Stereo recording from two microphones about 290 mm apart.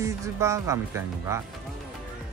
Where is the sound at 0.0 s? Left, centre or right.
Centre.